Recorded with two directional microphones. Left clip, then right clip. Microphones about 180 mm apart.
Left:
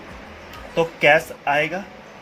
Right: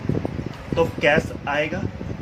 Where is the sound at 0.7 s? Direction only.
15° left (ahead or behind).